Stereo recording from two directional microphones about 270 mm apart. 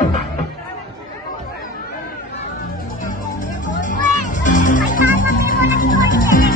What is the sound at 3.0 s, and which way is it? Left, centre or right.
Music, left.